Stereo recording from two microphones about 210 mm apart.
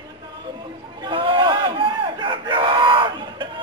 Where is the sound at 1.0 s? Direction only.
25° right (ahead or behind).